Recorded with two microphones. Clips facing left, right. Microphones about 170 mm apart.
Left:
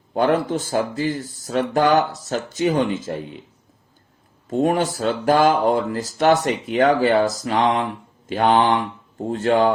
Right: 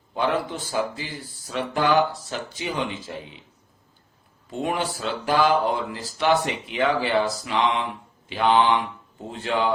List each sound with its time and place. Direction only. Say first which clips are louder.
0.1 s speech: left 6 dB; 45° left (ahead or behind)
4.4 s speech: left 7 dB; 45° left (ahead or behind)